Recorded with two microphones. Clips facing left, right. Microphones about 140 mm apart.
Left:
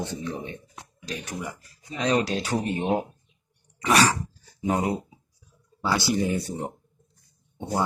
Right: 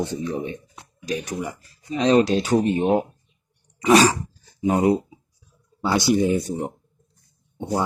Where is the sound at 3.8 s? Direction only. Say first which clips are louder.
Right 6 dB; 20° right (ahead or behind).